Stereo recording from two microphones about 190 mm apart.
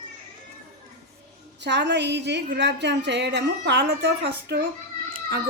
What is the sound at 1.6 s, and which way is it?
A woman's voice, 65° right (ahead or behind).